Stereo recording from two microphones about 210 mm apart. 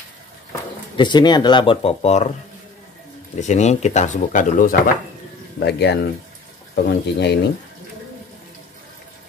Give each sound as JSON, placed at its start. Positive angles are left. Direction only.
{"t": 0.9, "sound": "speech", "side_deg": 20}
{"t": 3.3, "sound": "speech", "side_deg": 35}
{"t": 5.6, "sound": "speech", "side_deg": 50}